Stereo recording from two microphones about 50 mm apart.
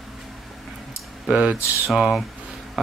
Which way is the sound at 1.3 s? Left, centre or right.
Centre.